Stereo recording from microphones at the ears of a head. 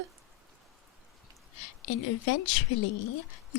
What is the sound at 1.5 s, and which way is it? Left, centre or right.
A woman's voice, left.